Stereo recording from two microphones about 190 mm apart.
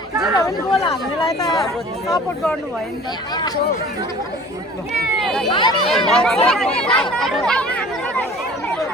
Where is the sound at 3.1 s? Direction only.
20° left (ahead or behind).